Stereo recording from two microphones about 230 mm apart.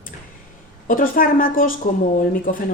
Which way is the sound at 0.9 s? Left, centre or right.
Left.